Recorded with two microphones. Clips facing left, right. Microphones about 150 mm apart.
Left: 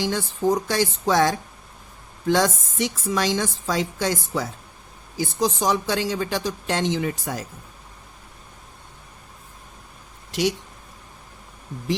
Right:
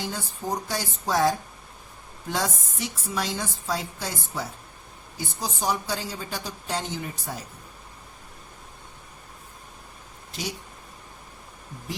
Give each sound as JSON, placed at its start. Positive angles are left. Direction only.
{"t": 0.0, "sound": "speech", "side_deg": 90}